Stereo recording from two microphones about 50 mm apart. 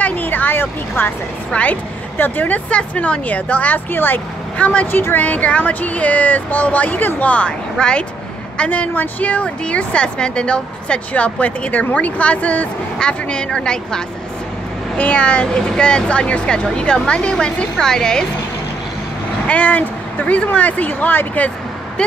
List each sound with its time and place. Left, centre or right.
0.0 s a sound: left
1.5 s a woman's voice: left
2.1 s speech: left
2.7 s speech: left
4.6 s a woman's voice: left
7.7 s speech: centre
8.5 s a woman's voice: left; by 18.2 s centre
19.4 s speech: left